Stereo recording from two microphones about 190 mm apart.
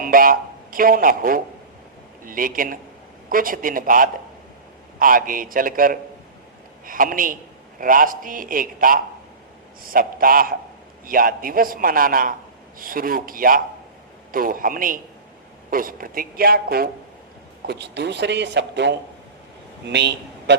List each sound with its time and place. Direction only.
0.0 s a man's voice: 50° right (ahead or behind); by 20.6 s 65° right (ahead or behind)